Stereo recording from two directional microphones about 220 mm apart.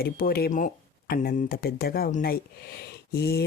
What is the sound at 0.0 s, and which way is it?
Speech, 45° left (ahead or behind).